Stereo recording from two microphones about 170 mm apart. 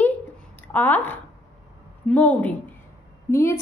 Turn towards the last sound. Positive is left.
turn(degrees=15)  # may be behind; listen again after turning